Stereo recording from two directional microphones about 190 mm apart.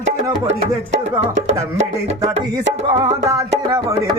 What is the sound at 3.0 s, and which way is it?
Music, 20° right (ahead or behind).